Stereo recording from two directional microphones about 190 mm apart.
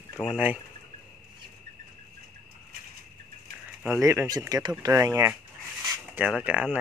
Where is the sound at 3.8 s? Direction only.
15° right (ahead or behind).